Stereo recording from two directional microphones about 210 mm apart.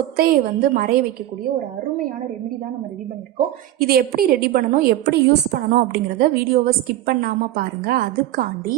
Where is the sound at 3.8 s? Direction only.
45° right (ahead or behind).